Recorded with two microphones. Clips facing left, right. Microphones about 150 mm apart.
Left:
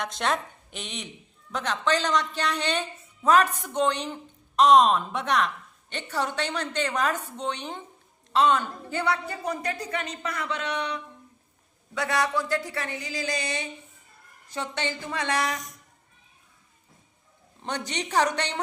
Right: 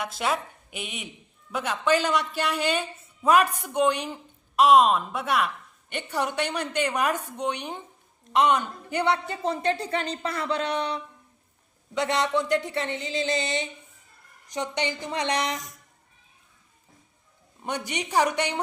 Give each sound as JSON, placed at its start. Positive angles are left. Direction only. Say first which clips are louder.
{"t": 0.0, "sound": "a woman's voice", "louder": "even", "side_deg": -5}
{"t": 11.9, "sound": "speech", "louder": "right 2 dB", "side_deg": -20}
{"t": 17.6, "sound": "a woman's voice", "louder": "right 1 dB", "side_deg": -10}